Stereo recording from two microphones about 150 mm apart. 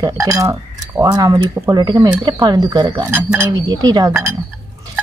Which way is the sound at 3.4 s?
25° right (ahead or behind).